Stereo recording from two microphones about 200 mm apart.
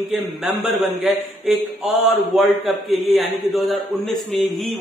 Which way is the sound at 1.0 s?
Centre (ahead or behind).